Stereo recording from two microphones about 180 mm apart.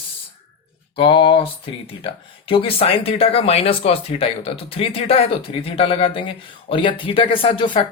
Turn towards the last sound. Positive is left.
turn(degrees=30)  # may be behind; listen again after turning